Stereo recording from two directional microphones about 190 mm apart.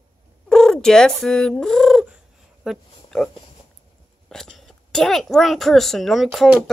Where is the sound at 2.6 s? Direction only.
Centre (ahead or behind).